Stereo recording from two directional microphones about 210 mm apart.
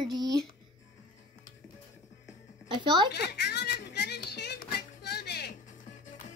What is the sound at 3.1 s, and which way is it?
Music, 50° left (ahead or behind).